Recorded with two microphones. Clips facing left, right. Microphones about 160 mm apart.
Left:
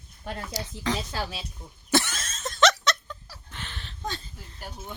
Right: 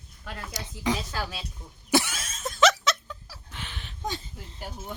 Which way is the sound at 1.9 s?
10° right (ahead or behind).